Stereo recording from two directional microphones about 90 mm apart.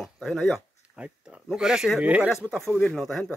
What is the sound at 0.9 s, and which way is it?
Speech, 15° right (ahead or behind).